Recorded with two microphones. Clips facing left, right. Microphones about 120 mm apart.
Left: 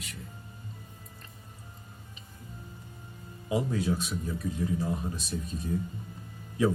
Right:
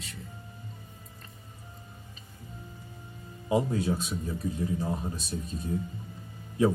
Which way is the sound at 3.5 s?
30° right (ahead or behind).